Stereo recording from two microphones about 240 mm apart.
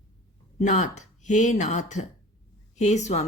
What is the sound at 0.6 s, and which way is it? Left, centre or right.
Speech, left.